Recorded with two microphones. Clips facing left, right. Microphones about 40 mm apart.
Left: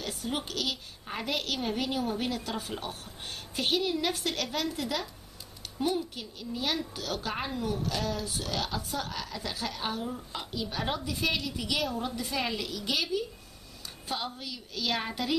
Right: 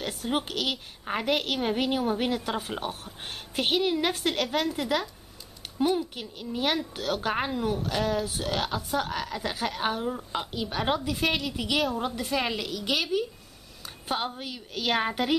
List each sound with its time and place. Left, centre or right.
0.3 s a woman's voice: right
6.1 s a woman's voice: right
12.5 s a woman's voice: centre
13.8 s a woman's voice: right